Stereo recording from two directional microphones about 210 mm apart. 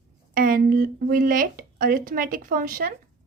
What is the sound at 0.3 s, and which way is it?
Speech, 40° right (ahead or behind).